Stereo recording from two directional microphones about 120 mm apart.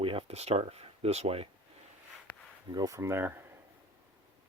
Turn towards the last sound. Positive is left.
turn(degrees=-20)  # may be behind; listen again after turning